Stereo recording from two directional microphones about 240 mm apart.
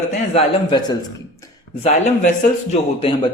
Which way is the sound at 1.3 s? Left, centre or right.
Centre.